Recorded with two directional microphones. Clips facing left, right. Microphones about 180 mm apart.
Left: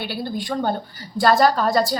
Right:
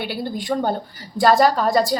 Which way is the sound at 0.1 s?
15° right (ahead or behind).